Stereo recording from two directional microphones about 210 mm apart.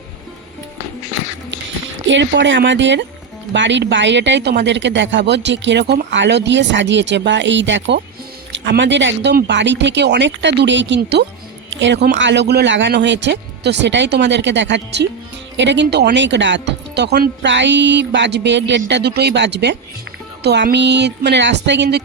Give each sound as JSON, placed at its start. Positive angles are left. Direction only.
{"t": 2.0, "sound": "speech", "side_deg": -60}